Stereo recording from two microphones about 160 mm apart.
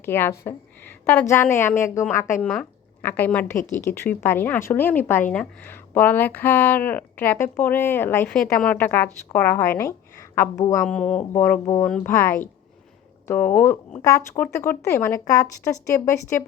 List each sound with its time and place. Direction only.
0.0 s speech: 15° left (ahead or behind)
10.8 s speech: 5° left (ahead or behind)